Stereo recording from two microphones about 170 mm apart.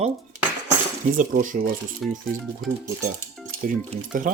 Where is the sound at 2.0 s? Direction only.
Centre (ahead or behind).